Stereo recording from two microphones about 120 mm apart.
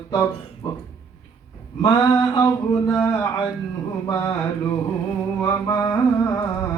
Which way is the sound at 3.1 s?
20° left (ahead or behind).